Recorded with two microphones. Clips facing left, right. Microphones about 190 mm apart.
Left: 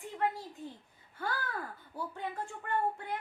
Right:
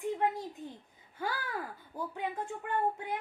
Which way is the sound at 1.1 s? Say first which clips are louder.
Right 1 dB; 10° right (ahead or behind).